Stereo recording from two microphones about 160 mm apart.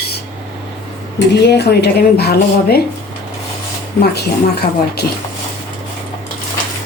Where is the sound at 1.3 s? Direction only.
90° left.